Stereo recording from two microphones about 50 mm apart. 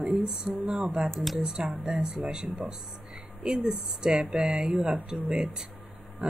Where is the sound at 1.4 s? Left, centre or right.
Centre.